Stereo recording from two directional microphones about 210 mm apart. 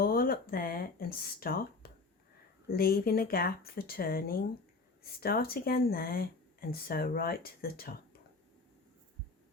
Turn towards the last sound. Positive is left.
turn(degrees=45)  # may be behind; listen again after turning